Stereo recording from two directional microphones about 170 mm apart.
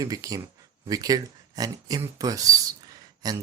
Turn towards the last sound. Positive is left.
turn(degrees=-20)  # may be behind; listen again after turning